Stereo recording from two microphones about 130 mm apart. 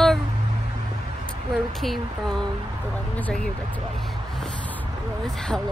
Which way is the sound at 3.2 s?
10° left (ahead or behind).